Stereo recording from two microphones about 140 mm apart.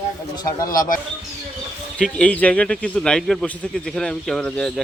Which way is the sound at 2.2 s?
10° left (ahead or behind).